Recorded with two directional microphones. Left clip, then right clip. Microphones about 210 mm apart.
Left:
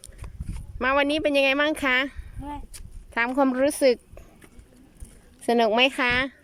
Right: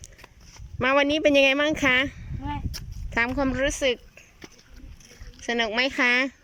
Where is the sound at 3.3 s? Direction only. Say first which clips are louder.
Left 3 dB; 15° left (ahead or behind).